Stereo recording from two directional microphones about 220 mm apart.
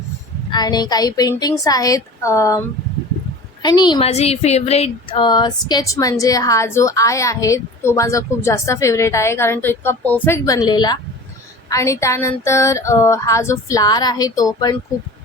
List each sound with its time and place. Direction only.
0.5 s speech: 20° left (ahead or behind)
3.6 s speech: 20° left (ahead or behind)